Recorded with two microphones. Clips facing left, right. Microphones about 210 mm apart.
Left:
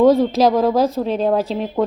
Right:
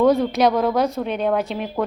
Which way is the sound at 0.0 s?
25° left (ahead or behind).